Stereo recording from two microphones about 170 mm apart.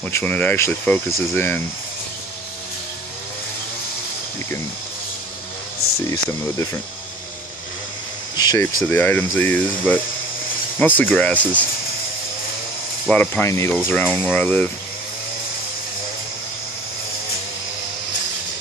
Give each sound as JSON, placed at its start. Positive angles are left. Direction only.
{"t": 0.0, "sound": "speech", "side_deg": 10}
{"t": 6.0, "sound": "speech", "side_deg": 20}
{"t": 8.4, "sound": "speech", "side_deg": 25}
{"t": 8.8, "sound": "speech", "side_deg": 10}
{"t": 13.1, "sound": "speech", "side_deg": 10}